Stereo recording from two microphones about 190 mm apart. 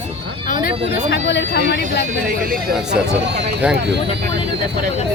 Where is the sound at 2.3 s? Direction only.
50° right (ahead or behind).